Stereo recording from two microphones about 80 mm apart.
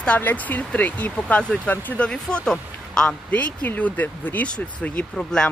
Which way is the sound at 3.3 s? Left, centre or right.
Centre.